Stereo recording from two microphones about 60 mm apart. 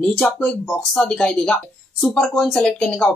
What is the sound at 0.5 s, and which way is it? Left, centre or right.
Speech, centre.